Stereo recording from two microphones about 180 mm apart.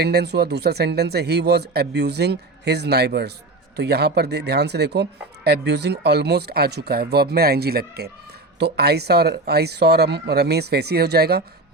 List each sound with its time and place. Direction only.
0.0 s speech: 65° right (ahead or behind)